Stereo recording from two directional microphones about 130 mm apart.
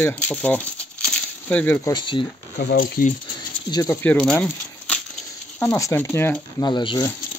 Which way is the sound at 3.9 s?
15° left (ahead or behind).